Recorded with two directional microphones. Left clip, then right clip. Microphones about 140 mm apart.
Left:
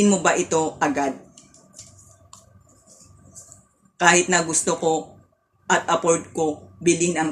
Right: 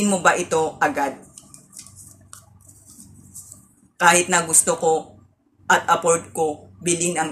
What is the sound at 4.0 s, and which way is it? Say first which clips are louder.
A woman's voice: right 1 dB; 20° left (ahead or behind).